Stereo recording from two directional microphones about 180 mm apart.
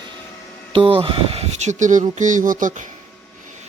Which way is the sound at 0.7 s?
30° right (ahead or behind).